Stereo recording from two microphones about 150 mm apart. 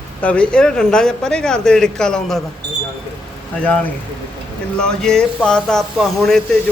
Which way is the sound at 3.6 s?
5° left (ahead or behind).